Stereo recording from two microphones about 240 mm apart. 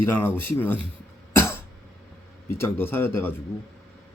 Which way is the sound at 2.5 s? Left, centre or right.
Centre.